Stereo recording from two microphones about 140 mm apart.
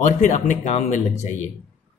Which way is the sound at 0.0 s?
60° left (ahead or behind).